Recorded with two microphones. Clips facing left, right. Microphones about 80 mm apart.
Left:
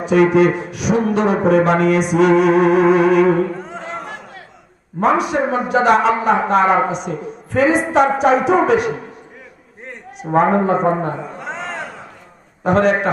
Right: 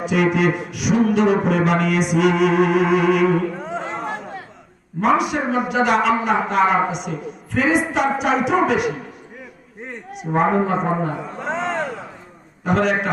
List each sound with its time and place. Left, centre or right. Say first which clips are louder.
0.0 s a man's voice: left 5 dB; left
3.6 s a sound: right 2 dB; centre
4.9 s a man's voice: left 2 dB; left
10.2 s a man's voice: left 3 dB; left
11.3 s a sound: right 4 dB; centre
12.6 s a man's voice: left 4 dB; left